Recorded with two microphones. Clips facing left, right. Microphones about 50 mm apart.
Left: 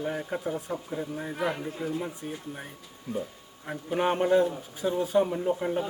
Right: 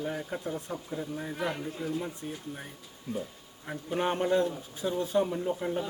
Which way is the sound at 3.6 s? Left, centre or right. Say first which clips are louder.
Left 3 dB; centre.